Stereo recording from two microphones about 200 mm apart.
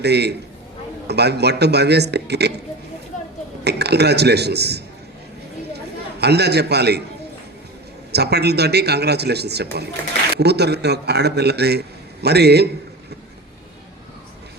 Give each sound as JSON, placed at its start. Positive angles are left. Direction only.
{"t": 0.0, "sound": "a man's voice", "side_deg": -55}
{"t": 3.6, "sound": "a man's voice", "side_deg": -55}
{"t": 6.1, "sound": "a man's voice", "side_deg": -55}
{"t": 8.1, "sound": "a man's voice", "side_deg": -55}